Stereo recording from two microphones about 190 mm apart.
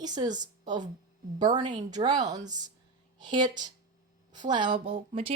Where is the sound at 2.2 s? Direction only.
40° right (ahead or behind).